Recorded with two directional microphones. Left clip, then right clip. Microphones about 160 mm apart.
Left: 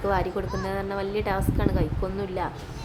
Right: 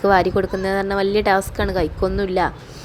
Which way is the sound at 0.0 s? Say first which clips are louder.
Right 10 dB; 35° right (ahead or behind).